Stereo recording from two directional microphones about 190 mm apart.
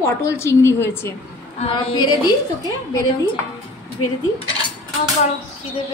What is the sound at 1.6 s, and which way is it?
Speech, 30° left (ahead or behind).